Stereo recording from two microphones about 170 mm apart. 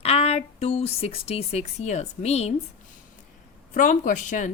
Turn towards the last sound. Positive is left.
turn(degrees=50)  # may be behind; listen again after turning